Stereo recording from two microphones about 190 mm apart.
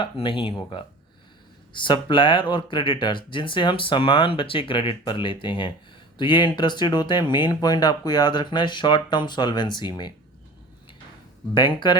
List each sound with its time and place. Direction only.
0.0 s speech: 25° left (ahead or behind)
11.5 s speech: 25° left (ahead or behind)